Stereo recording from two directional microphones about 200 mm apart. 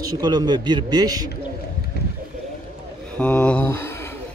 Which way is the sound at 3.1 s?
5° left (ahead or behind).